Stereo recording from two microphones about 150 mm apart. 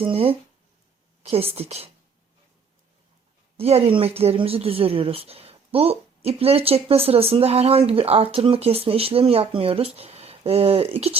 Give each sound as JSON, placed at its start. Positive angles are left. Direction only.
{"t": 0.0, "sound": "speech", "side_deg": -40}
{"t": 3.6, "sound": "speech", "side_deg": -40}